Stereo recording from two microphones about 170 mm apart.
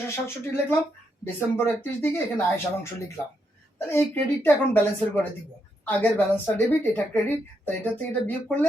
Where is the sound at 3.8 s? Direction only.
15° left (ahead or behind).